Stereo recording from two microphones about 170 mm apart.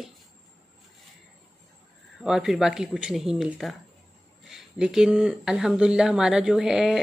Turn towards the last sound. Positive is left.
turn(degrees=-5)  # may be behind; listen again after turning